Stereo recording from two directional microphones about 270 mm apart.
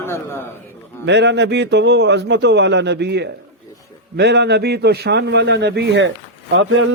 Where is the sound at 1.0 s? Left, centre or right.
Right.